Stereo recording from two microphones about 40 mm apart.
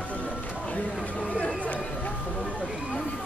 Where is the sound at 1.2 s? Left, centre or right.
Left.